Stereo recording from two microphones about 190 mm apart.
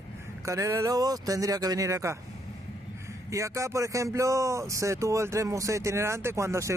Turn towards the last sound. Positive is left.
turn(degrees=-15)  # may be behind; listen again after turning